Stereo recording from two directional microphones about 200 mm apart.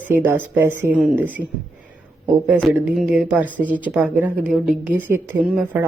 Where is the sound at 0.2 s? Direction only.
10° right (ahead or behind).